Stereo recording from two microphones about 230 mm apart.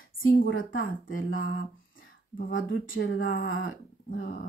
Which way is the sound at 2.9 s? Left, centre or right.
Left.